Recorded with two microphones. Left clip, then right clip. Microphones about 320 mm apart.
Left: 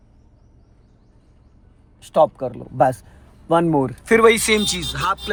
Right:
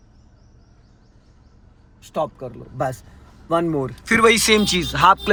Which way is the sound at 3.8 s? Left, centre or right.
Centre.